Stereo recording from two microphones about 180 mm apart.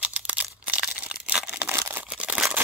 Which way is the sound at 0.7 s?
5° right (ahead or behind).